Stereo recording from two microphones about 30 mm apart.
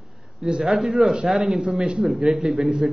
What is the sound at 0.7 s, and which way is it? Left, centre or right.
Speech, centre.